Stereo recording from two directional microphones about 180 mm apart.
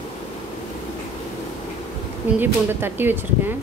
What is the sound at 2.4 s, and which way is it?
Speech, 10° right (ahead or behind).